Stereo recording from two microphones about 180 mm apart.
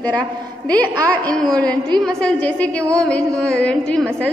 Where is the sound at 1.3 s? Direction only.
5° left (ahead or behind).